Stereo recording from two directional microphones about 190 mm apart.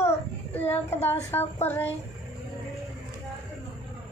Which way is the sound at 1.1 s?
15° left (ahead or behind).